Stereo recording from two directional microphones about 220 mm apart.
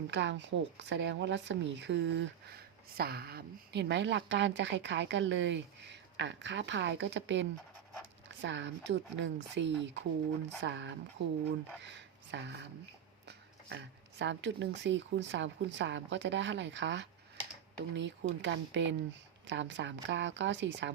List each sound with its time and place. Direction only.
0.1 s speech: 55° right (ahead or behind)